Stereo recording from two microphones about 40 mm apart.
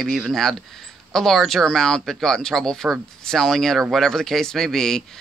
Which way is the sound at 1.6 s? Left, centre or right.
Centre.